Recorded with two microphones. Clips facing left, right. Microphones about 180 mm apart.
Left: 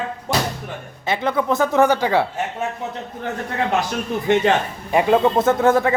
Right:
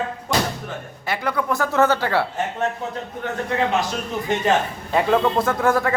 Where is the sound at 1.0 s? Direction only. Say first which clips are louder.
Left 3 dB; 20° left (ahead or behind).